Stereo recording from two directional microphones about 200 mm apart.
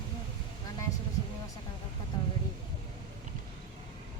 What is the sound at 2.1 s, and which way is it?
Vehicle, 20° left (ahead or behind).